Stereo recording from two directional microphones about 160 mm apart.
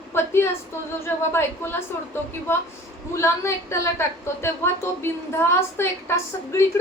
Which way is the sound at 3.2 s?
15° left (ahead or behind).